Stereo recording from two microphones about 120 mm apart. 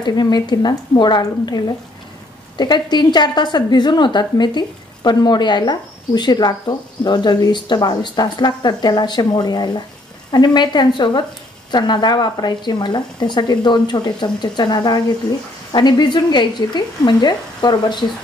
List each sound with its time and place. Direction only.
0.0 s a woman's voice: 35° left (ahead or behind)